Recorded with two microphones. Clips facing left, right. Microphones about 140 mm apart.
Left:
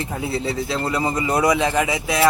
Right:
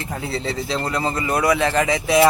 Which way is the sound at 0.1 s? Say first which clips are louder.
Right 2 dB; 5° left (ahead or behind).